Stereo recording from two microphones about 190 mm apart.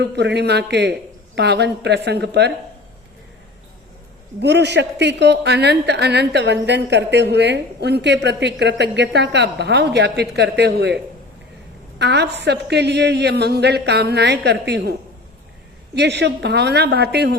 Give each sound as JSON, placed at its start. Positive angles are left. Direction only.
{"t": 0.0, "sound": "a woman's voice", "side_deg": -65}
{"t": 4.4, "sound": "a woman's voice", "side_deg": -65}
{"t": 11.9, "sound": "a woman's voice", "side_deg": -60}
{"t": 16.0, "sound": "a woman's voice", "side_deg": -65}